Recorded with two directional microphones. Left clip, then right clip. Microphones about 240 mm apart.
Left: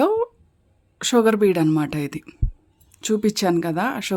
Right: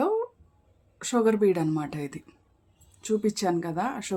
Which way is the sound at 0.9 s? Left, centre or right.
Left.